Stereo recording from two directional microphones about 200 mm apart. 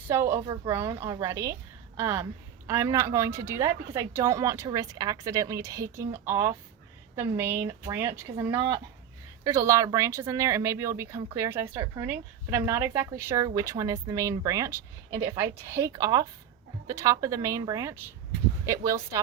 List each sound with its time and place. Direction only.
0.1 s a woman's voice: 15° right (ahead or behind)